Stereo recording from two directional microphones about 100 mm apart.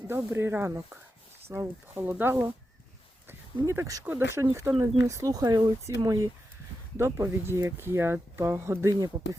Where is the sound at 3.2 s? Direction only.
25° right (ahead or behind).